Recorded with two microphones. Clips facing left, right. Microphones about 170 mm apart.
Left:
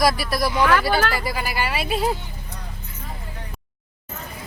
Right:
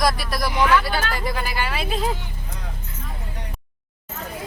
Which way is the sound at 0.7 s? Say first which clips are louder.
Left 2 dB; 55° left (ahead or behind).